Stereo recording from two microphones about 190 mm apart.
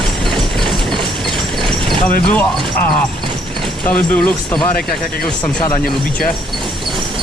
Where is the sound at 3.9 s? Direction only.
10° left (ahead or behind).